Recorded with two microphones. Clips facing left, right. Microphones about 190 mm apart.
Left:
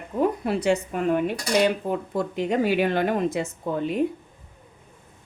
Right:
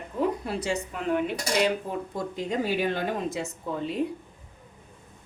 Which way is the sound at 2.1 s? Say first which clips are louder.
Left 5 dB; 65° left (ahead or behind).